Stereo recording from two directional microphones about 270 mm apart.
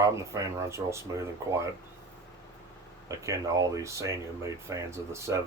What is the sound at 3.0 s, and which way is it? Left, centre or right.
Speech, centre.